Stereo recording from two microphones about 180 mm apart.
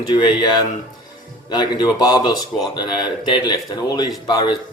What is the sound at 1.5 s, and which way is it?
Speech, 25° left (ahead or behind).